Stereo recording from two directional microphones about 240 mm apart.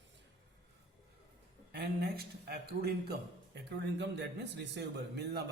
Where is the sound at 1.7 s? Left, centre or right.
Right.